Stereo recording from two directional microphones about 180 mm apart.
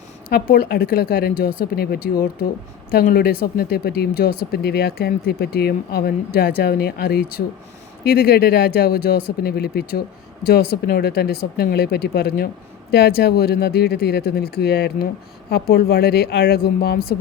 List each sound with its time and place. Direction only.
0.3 s speech: 60° left (ahead or behind)